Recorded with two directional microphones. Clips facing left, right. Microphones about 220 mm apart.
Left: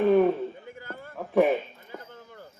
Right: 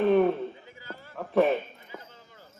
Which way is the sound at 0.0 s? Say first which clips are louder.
Left 1 dB; 5° left (ahead or behind).